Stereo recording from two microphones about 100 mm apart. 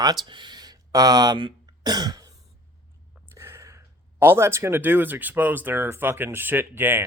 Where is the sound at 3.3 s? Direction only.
25° right (ahead or behind).